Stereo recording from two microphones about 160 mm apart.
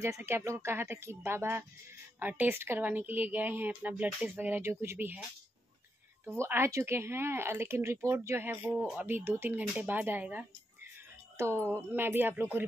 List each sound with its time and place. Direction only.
0.0 s a woman's voice: 15° right (ahead or behind)
6.4 s a woman's voice: 15° right (ahead or behind)